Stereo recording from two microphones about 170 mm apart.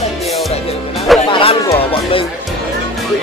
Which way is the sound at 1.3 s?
30° left (ahead or behind).